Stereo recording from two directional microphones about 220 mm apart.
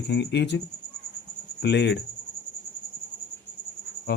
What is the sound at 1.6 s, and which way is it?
Speech, 50° left (ahead or behind).